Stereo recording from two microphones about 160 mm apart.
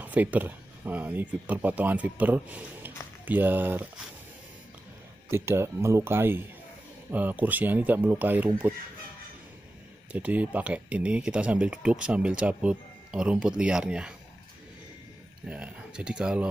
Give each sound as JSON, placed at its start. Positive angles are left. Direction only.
{"t": 0.0, "sound": "speech", "side_deg": -10}
{"t": 5.3, "sound": "speech", "side_deg": -15}
{"t": 10.1, "sound": "speech", "side_deg": -10}
{"t": 15.4, "sound": "speech", "side_deg": -10}